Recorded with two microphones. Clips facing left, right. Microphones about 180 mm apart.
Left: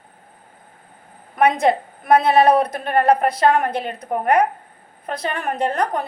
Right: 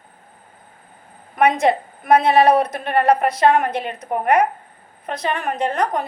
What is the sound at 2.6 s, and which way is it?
Speech, 45° left (ahead or behind).